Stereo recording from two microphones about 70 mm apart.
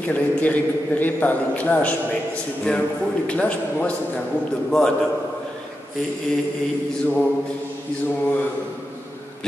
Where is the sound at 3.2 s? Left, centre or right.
Centre.